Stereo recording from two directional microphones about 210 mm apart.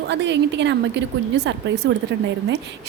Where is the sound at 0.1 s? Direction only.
55° right (ahead or behind).